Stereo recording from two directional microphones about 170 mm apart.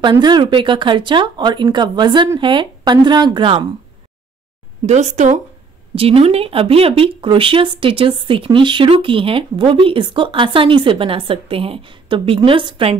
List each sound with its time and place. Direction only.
0.0 s speech: 25° right (ahead or behind)
4.8 s speech: 45° right (ahead or behind)